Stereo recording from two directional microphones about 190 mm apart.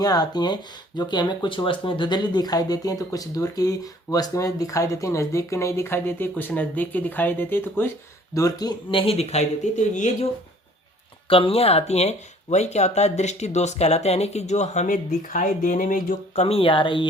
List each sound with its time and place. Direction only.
0.0 s speech: 20° left (ahead or behind); by 10.2 s 40° left (ahead or behind)
11.3 s speech: 30° left (ahead or behind)